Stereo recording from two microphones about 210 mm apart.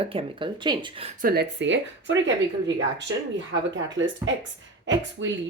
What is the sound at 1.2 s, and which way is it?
A woman's voice, 50° right (ahead or behind).